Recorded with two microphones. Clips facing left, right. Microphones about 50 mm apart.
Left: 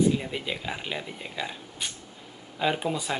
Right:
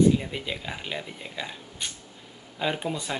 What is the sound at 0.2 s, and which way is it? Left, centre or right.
Speech, centre.